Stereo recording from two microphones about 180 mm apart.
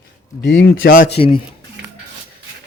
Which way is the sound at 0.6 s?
90° left.